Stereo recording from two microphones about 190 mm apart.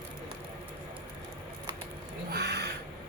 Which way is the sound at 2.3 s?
60° right (ahead or behind).